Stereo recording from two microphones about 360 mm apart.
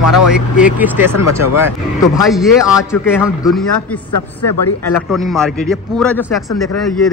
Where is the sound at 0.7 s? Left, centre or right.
Centre.